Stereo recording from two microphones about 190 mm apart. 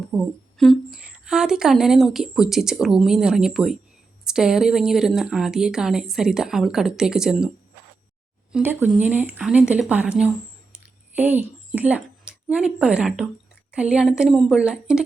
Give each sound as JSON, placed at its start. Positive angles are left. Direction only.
{"t": 0.1, "sound": "a woman's voice", "side_deg": 0}
{"t": 8.5, "sound": "a woman's voice", "side_deg": -10}